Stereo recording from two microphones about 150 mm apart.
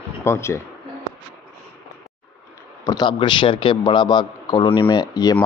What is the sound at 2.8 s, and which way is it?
Speech, 30° left (ahead or behind).